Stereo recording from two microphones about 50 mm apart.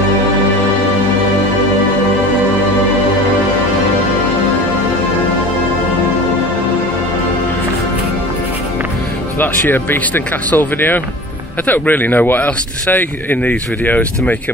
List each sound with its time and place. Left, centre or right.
9.4 s speech: left